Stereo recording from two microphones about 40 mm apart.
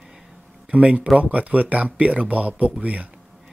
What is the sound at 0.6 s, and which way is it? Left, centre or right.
Speech, right.